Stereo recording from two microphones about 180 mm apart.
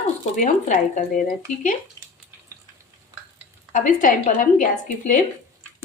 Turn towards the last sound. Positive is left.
turn(degrees=45)  # may be behind; listen again after turning